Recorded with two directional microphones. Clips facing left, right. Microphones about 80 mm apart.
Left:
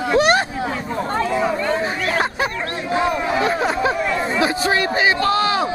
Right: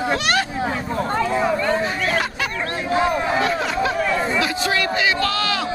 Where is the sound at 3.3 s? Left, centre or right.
Left.